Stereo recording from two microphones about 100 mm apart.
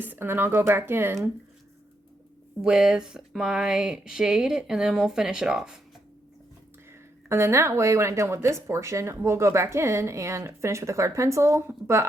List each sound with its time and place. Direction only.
0.0 s speech: 20° right (ahead or behind)
2.6 s speech: 5° right (ahead or behind)
7.3 s speech: 25° right (ahead or behind)